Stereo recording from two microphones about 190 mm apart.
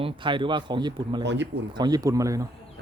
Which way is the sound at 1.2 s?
70° right (ahead or behind).